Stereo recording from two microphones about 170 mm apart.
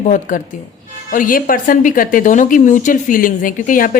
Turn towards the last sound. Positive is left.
turn(degrees=55)  # may be behind; listen again after turning